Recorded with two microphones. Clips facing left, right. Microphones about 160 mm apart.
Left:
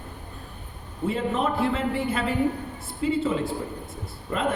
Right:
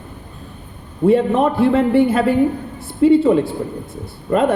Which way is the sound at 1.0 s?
55° right (ahead or behind).